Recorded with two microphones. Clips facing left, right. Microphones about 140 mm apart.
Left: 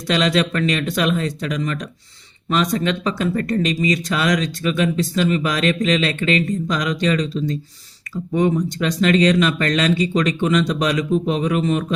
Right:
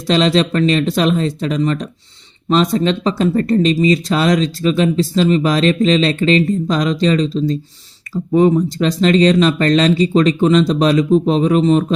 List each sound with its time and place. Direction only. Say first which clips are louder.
0.1 s speech: right 5 dB; 30° right (ahead or behind)